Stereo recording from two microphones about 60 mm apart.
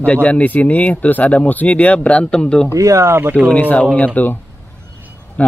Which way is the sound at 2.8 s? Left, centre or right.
Right.